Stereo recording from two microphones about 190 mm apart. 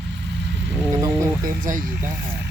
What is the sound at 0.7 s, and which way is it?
Speech, 15° right (ahead or behind).